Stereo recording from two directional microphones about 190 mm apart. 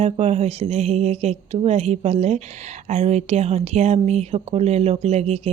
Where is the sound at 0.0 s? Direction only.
35° right (ahead or behind).